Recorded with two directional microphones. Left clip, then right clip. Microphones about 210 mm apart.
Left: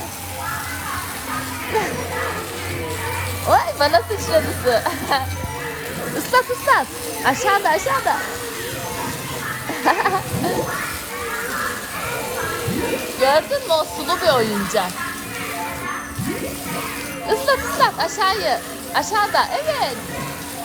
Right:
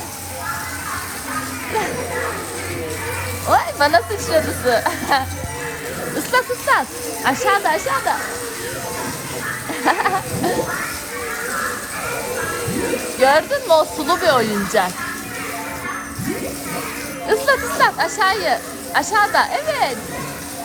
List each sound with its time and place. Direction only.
3.8 s speech: 35° left (ahead or behind)
6.3 s speech: 45° left (ahead or behind)
7.5 s speech: 30° left (ahead or behind)
9.8 s a sound: 30° left (ahead or behind)
13.1 s speech: 25° left (ahead or behind)
17.2 s speech: 30° left (ahead or behind)